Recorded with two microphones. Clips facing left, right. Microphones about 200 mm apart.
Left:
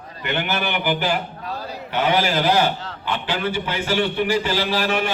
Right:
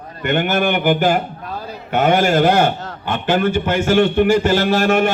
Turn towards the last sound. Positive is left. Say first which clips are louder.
# right 7 dB
turn(degrees=-50)  # may be behind; listen again after turning